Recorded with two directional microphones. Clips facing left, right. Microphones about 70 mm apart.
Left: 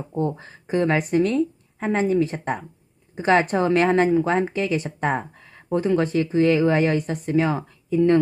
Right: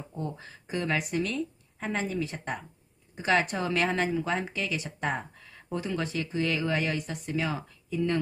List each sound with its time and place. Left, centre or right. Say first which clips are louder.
0.1 s speech: left 12 dB; left